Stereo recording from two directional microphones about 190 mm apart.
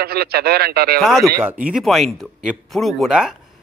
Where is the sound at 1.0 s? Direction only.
Centre (ahead or behind).